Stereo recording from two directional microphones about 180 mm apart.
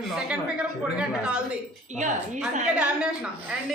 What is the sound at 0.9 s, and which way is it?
Speech, 5° right (ahead or behind).